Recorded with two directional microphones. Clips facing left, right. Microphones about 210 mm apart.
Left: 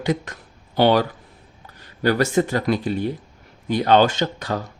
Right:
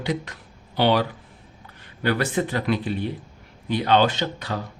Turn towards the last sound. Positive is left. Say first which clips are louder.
# left 3 dB
turn(degrees=45)  # may be behind; listen again after turning